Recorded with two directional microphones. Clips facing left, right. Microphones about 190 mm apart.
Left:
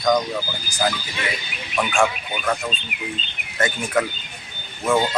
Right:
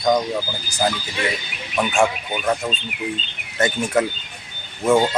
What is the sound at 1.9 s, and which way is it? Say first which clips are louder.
Speech: right 2 dB; 25° right (ahead or behind).